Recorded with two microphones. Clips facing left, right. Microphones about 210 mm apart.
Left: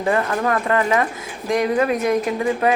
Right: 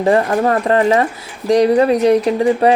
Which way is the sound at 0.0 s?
35° right (ahead or behind).